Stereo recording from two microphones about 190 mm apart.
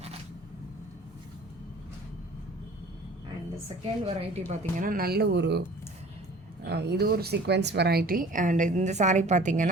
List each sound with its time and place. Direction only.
4.0 s a woman's voice: 35° right (ahead or behind)
4.8 s speech: 50° right (ahead or behind)
6.7 s a woman's voice: 60° right (ahead or behind); by 9.6 s 40° right (ahead or behind)